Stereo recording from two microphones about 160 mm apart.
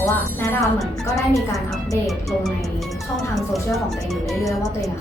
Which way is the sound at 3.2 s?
Centre (ahead or behind).